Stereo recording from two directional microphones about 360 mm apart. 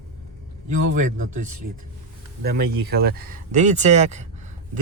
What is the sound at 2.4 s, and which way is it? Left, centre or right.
Speech, right.